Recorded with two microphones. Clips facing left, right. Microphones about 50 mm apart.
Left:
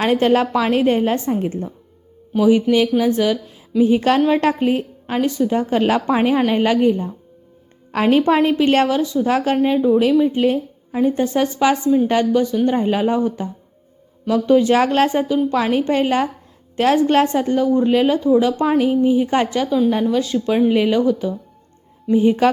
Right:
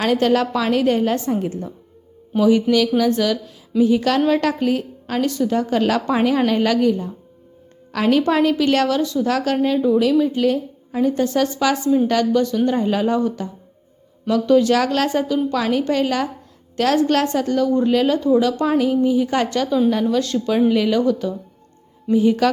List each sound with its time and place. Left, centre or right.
0.0 s a woman's voice: left
3.8 s a woman's voice: left
12.3 s a woman's voice: centre
22.1 s a woman's voice: left